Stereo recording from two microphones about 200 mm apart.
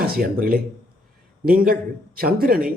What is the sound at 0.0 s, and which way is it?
A man's voice, 50° right (ahead or behind).